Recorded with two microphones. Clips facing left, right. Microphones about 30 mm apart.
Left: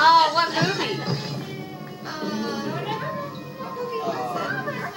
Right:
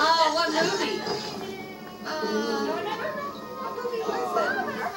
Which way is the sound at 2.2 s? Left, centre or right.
Left.